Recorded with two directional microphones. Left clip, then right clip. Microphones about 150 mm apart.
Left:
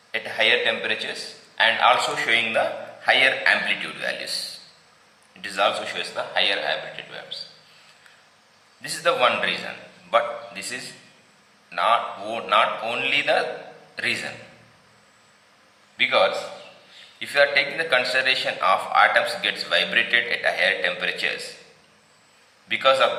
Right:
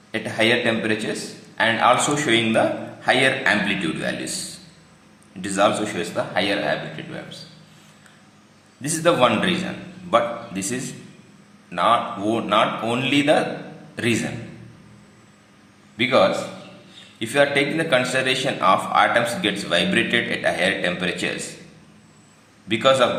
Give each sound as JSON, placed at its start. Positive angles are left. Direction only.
{"t": 0.1, "sound": "a man's voice", "side_deg": -30}
{"t": 5.4, "sound": "a man's voice", "side_deg": -25}
{"t": 8.8, "sound": "a man's voice", "side_deg": -25}
{"t": 16.0, "sound": "a man's voice", "side_deg": -30}
{"t": 22.7, "sound": "a man's voice", "side_deg": -25}